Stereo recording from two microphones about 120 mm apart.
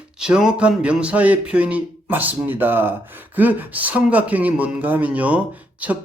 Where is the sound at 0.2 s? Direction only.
5° right (ahead or behind).